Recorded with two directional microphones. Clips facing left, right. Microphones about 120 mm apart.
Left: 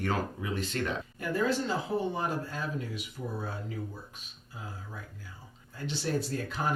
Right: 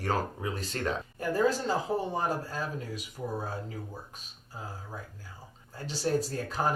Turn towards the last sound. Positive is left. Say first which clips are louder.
# right 2 dB
turn(degrees=-40)  # may be behind; listen again after turning